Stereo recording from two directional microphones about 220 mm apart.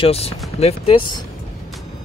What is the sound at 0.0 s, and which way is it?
Speech, 25° left (ahead or behind).